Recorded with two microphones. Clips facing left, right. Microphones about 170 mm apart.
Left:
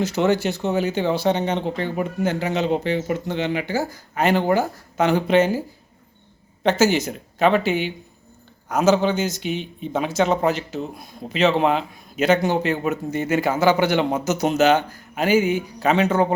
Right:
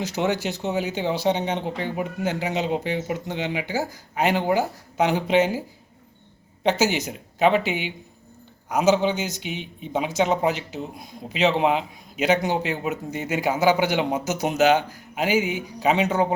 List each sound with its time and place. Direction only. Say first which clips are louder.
0.0 s speech: left 5 dB; 15° right (ahead or behind)